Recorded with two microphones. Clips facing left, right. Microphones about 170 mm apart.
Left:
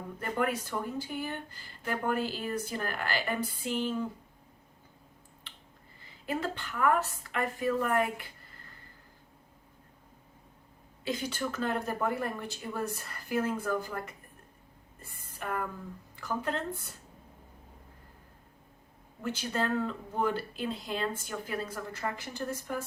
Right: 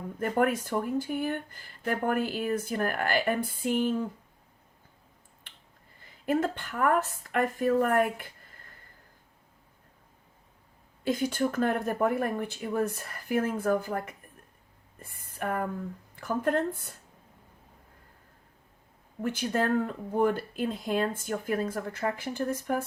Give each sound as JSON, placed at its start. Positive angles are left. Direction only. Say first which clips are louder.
{"t": 0.2, "sound": "speech", "louder": "right 5 dB", "side_deg": -50}
{"t": 6.2, "sound": "speech", "louder": "right 6 dB", "side_deg": -50}
{"t": 11.0, "sound": "speech", "louder": "right 6 dB", "side_deg": -50}
{"t": 15.0, "sound": "a sound", "louder": "right 5 dB", "side_deg": -55}
{"t": 16.1, "sound": "speech", "louder": "right 6 dB", "side_deg": -50}
{"t": 19.2, "sound": "speech", "louder": "right 4 dB", "side_deg": -55}